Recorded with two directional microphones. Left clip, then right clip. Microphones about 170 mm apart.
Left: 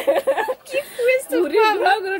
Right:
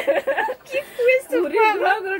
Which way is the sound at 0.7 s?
15° left (ahead or behind).